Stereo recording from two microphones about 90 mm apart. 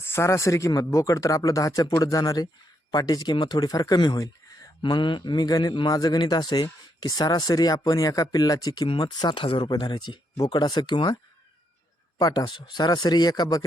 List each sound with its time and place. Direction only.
0.0 s speech: 30° left (ahead or behind); by 4.2 s 50° left (ahead or behind)
4.8 s speech: 60° left (ahead or behind)
9.6 s speech: 55° left (ahead or behind)
12.2 s speech: 45° left (ahead or behind)
12.5 s speech: 55° left (ahead or behind)